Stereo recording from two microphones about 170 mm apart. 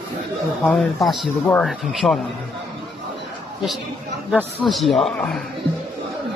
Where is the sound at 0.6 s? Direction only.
Centre (ahead or behind).